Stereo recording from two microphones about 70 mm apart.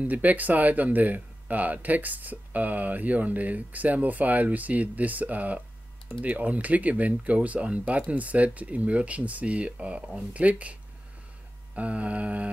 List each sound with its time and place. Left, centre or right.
0.0 s speech: right